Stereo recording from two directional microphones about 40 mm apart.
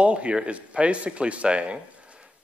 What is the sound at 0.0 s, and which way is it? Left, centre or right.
A man's voice, right.